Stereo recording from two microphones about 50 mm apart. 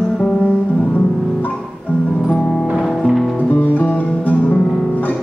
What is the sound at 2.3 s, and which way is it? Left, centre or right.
Music, centre.